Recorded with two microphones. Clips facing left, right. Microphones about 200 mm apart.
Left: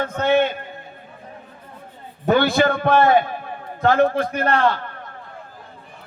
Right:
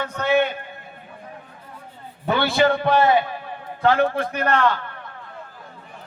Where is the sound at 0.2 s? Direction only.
25° left (ahead or behind).